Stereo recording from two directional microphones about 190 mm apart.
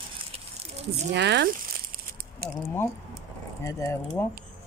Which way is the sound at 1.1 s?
65° right (ahead or behind).